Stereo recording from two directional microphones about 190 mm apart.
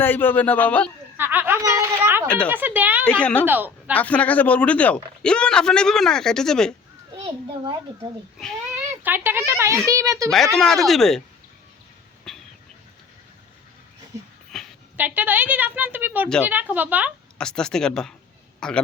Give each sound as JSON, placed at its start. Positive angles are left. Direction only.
{"t": 0.0, "sound": "speech", "side_deg": 10}
{"t": 1.1, "sound": "a sound", "side_deg": -10}
{"t": 2.2, "sound": "speech", "side_deg": 5}
{"t": 2.5, "sound": "a woman's voice", "side_deg": -10}
{"t": 3.0, "sound": "speech", "side_deg": 5}
{"t": 3.4, "sound": "speech", "side_deg": -10}
{"t": 3.9, "sound": "speech", "side_deg": 5}
{"t": 7.3, "sound": "a child's voice", "side_deg": -25}
{"t": 9.0, "sound": "a woman's voice", "side_deg": -10}
{"t": 10.2, "sound": "speech", "side_deg": 0}
{"t": 12.3, "sound": "a sound", "side_deg": 5}
{"t": 14.5, "sound": "a sound", "side_deg": 0}
{"t": 14.9, "sound": "a woman's voice", "side_deg": -10}
{"t": 17.3, "sound": "speech", "side_deg": 5}